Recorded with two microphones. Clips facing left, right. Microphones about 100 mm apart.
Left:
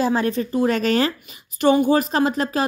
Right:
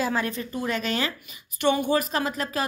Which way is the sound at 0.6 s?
45° left (ahead or behind).